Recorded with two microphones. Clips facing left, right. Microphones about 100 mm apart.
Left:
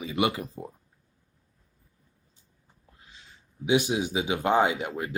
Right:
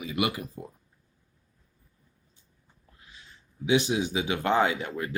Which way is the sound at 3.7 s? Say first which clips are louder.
Even; 20° left (ahead or behind).